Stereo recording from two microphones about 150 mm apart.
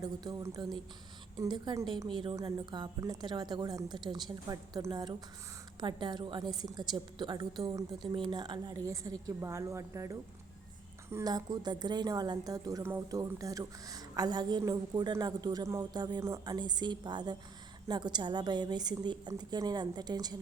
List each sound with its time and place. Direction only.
0.0 s a woman's voice: 25° right (ahead or behind)